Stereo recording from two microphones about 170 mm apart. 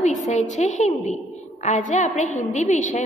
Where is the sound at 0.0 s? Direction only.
45° left (ahead or behind).